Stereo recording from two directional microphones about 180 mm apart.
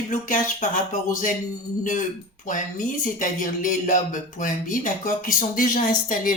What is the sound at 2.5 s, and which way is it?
Speech, 45° left (ahead or behind).